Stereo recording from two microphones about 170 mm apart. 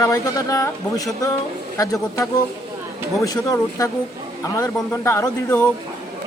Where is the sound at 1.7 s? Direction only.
20° left (ahead or behind).